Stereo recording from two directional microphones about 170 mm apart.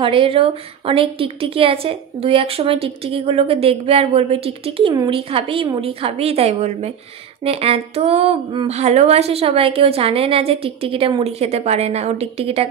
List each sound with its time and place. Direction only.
0.0 s a woman's voice: 30° right (ahead or behind)